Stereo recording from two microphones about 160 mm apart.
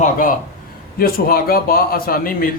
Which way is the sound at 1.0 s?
65° left (ahead or behind).